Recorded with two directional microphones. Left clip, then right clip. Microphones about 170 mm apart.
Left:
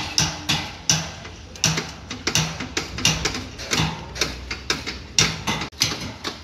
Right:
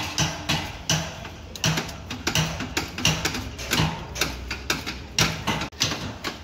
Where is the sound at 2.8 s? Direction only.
50° right (ahead or behind).